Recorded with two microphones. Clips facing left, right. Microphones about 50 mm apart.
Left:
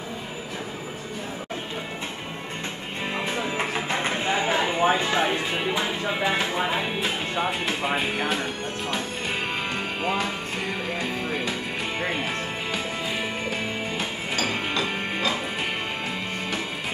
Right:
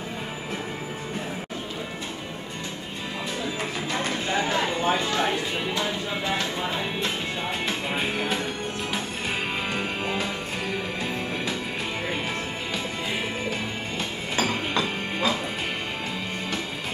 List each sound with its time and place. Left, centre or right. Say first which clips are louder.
3.5 s music: left 2 dB; left
7.6 s music: left 2 dB; centre
9.8 s music: left 1 dB; centre
14.8 s music: even; centre